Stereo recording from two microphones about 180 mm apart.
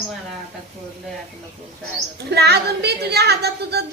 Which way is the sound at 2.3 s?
65° right (ahead or behind).